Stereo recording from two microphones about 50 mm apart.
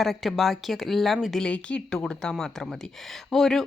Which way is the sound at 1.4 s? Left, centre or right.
Left.